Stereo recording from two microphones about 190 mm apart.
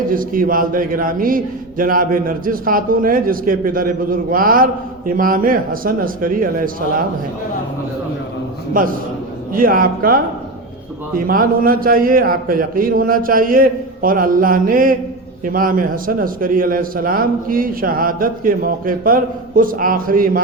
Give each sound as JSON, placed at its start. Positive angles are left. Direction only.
{"t": 0.1, "sound": "a man's voice", "side_deg": -45}
{"t": 9.5, "sound": "a man's voice", "side_deg": -50}
{"t": 11.3, "sound": "a man's voice", "side_deg": -50}